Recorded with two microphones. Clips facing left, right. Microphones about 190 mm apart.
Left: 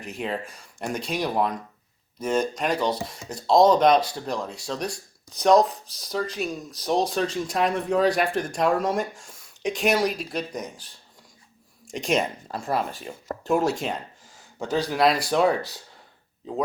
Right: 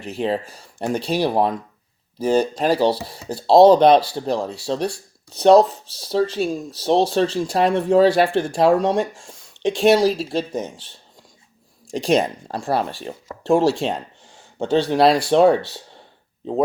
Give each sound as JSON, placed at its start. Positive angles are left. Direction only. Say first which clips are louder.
{"t": 0.0, "sound": "speech", "louder": "right 7 dB", "side_deg": -30}